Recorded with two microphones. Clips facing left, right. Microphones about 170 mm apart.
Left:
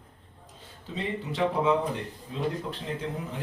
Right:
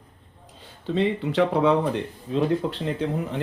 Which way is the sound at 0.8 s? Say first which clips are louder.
Right 10 dB; 70° right (ahead or behind).